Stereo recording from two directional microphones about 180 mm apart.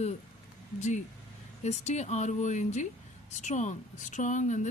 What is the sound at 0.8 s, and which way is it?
Speech, 40° left (ahead or behind).